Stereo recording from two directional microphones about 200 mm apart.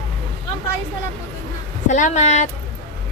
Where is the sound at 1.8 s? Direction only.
40° left (ahead or behind).